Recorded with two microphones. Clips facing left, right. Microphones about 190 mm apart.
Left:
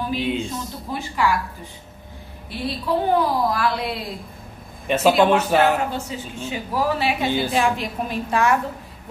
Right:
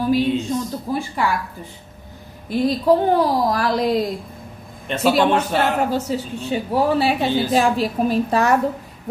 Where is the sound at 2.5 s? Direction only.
40° right (ahead or behind).